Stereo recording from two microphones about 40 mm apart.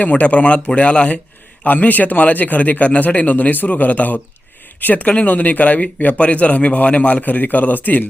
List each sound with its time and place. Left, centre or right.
0.0 s speech: left
1.6 s a man's voice: left
7.2 s a man's voice: left